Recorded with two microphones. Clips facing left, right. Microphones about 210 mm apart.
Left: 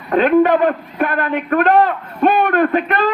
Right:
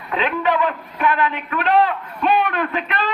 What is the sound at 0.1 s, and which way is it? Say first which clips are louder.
A man's voice: left 9 dB; 50° left (ahead or behind).